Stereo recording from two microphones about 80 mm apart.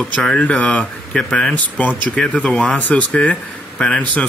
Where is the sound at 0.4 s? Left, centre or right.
Centre.